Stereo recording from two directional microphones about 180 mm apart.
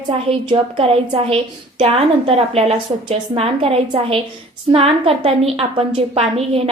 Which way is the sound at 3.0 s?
30° right (ahead or behind).